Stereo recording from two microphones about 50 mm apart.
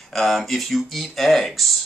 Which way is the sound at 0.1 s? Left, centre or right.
Centre.